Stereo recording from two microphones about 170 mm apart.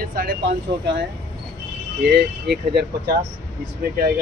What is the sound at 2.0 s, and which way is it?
Speech, 70° right (ahead or behind).